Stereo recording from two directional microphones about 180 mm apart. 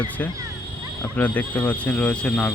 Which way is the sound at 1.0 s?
10° left (ahead or behind).